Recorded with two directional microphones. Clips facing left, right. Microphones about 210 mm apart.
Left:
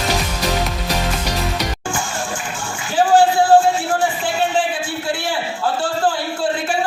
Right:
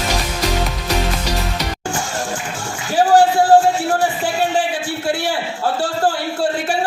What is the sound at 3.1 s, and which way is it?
Music, 40° right (ahead or behind).